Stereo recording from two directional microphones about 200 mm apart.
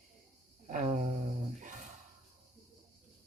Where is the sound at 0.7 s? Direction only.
40° right (ahead or behind).